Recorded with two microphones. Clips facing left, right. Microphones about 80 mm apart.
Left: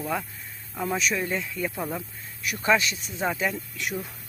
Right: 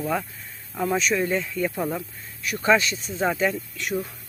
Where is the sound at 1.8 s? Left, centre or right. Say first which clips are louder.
Right 4 dB; centre.